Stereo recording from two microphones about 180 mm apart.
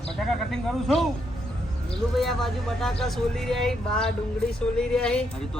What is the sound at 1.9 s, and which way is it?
Speech, centre (ahead or behind).